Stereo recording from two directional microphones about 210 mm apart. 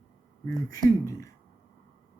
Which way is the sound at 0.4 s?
15° left (ahead or behind).